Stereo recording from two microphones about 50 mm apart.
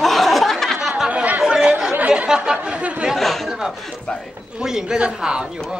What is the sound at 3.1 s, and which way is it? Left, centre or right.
Speech, centre.